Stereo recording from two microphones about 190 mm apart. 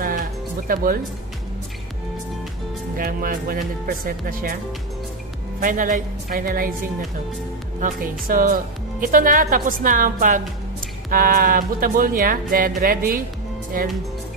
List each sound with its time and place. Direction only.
0.7 s a woman's voice: 50° right (ahead or behind)
3.0 s a woman's voice: 50° right (ahead or behind)
5.6 s a woman's voice: 45° right (ahead or behind)
7.8 s a woman's voice: 45° right (ahead or behind)